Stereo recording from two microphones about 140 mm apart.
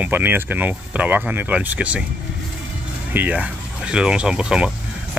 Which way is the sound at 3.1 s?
10° right (ahead or behind).